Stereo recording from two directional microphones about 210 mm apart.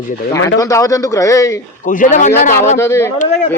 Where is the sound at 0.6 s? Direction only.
15° left (ahead or behind).